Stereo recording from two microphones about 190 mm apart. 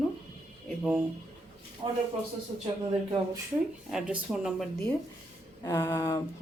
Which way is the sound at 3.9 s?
5° right (ahead or behind).